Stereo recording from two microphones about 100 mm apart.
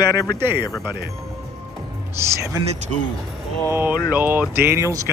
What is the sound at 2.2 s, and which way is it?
Speech, 30° right (ahead or behind).